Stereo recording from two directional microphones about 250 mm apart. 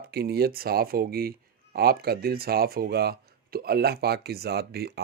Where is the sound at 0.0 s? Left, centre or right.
Right.